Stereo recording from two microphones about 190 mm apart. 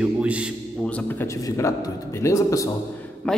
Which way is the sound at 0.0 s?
5° right (ahead or behind).